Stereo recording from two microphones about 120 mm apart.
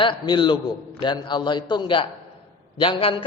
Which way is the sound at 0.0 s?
45° left (ahead or behind).